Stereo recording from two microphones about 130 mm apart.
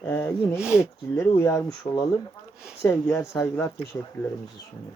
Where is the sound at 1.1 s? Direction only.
20° left (ahead or behind).